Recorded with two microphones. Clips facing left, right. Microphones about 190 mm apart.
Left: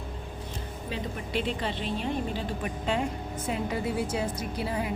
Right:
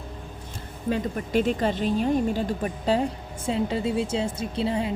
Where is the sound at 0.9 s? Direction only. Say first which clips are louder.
Right 9 dB; 45° right (ahead or behind).